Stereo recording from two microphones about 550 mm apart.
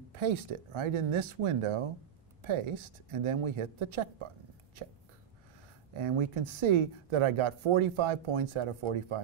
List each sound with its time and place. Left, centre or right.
0.1 s speech: right
5.9 s speech: right